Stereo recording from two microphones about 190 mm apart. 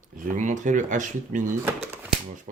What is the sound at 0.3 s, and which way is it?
Speech, 40° right (ahead or behind).